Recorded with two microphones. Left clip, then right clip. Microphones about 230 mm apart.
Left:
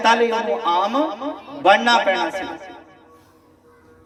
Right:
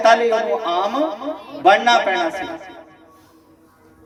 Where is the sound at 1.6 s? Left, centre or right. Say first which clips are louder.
Right 1 dB; left.